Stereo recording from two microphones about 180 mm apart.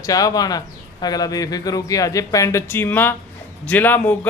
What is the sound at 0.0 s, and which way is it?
Speech, 20° left (ahead or behind).